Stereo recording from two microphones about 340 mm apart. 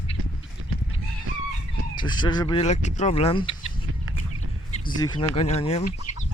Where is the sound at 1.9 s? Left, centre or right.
Centre.